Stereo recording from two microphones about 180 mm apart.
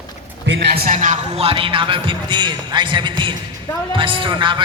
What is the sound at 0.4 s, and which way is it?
Speech, 70° right (ahead or behind).